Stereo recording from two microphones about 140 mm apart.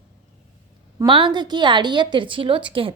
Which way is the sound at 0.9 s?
35° right (ahead or behind).